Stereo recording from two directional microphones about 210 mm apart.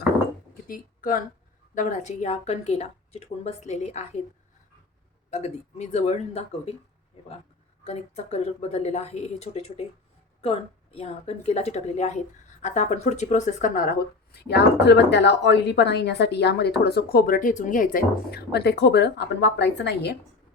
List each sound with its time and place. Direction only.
0.7 s speech: 40° left (ahead or behind)
5.3 s speech: 30° left (ahead or behind)
7.9 s speech: 30° left (ahead or behind)
14.3 s speech: 50° left (ahead or behind)